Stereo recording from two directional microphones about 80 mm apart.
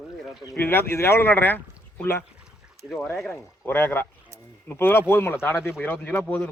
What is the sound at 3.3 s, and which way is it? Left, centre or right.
Speech, left.